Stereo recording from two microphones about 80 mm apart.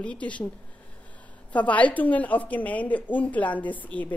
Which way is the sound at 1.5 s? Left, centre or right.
Centre.